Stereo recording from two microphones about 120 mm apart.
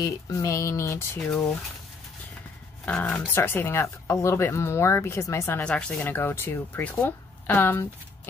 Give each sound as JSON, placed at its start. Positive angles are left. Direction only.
{"t": 0.0, "sound": "speech", "side_deg": 25}
{"t": 2.8, "sound": "speech", "side_deg": 15}
{"t": 5.6, "sound": "speech", "side_deg": 10}